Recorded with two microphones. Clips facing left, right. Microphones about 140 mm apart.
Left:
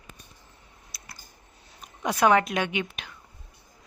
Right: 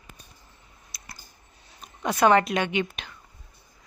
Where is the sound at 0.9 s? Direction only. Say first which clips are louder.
Even; 5° left (ahead or behind).